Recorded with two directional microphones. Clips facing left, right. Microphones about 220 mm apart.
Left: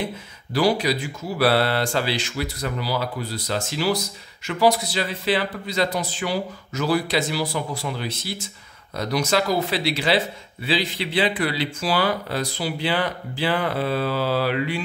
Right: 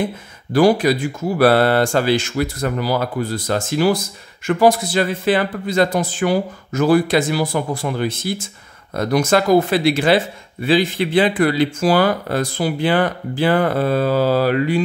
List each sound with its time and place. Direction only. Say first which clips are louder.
0.0 s speech: right 6 dB; 50° right (ahead or behind)